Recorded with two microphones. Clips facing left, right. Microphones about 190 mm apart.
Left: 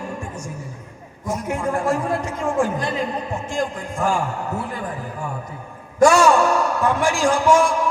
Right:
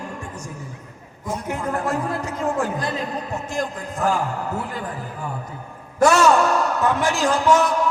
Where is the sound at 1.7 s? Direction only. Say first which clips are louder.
Left 3 dB; 25° left (ahead or behind).